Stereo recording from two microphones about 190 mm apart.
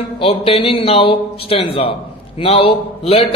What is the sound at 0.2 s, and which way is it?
A man's voice, 30° left (ahead or behind).